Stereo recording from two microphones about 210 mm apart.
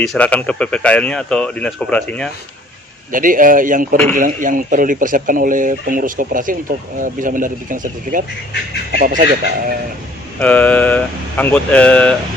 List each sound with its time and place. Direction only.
0.0 s speech: 5° left (ahead or behind)
3.1 s speech: 40° right (ahead or behind)
10.4 s speech: 5° left (ahead or behind)